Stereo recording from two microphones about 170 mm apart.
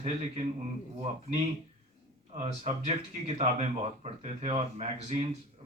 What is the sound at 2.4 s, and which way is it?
Speech, 40° right (ahead or behind).